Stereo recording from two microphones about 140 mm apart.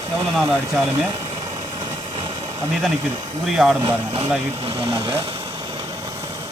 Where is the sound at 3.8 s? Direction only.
40° right (ahead or behind).